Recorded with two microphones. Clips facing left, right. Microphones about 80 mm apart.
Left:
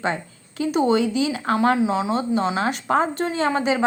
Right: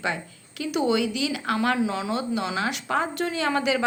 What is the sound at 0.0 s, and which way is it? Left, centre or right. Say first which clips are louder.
Speech: left 4 dB; left.